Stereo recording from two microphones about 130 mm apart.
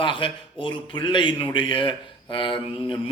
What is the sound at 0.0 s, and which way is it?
A man's voice, 40° left (ahead or behind).